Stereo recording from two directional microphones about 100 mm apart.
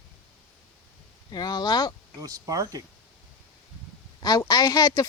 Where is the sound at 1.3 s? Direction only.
40° left (ahead or behind).